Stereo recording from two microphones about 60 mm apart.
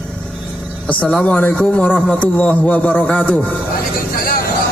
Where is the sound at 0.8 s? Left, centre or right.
Left.